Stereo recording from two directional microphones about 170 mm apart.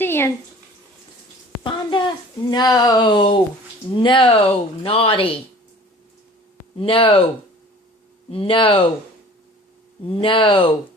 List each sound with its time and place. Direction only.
0.0 s speech: 15° left (ahead or behind)
1.6 s speech: 25° left (ahead or behind)
6.7 s speech: 30° left (ahead or behind)
8.3 s speech: 30° left (ahead or behind)
10.1 s speech: 30° left (ahead or behind)